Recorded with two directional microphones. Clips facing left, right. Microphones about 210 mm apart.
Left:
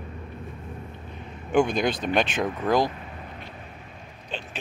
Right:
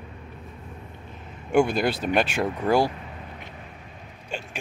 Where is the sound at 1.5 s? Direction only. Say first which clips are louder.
Right 1 dB; 5° right (ahead or behind).